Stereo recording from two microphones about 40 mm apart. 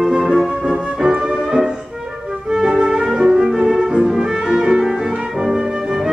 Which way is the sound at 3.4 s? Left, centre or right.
Centre.